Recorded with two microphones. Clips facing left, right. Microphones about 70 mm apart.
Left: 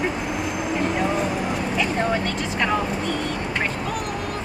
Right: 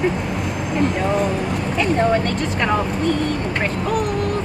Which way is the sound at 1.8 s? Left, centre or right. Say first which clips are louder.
Right 7 dB; centre.